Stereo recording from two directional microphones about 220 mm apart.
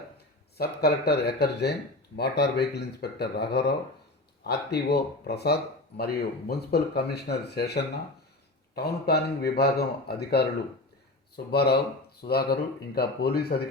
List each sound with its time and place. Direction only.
0.5 s speech: 45° left (ahead or behind)